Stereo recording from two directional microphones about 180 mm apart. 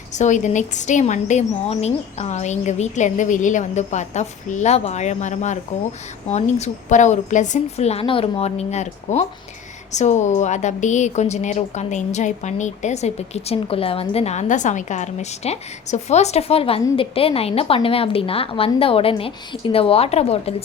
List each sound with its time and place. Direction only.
0.1 s a woman's voice: 40° left (ahead or behind)